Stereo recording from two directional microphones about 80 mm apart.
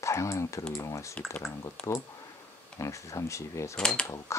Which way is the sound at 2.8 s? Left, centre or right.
Left.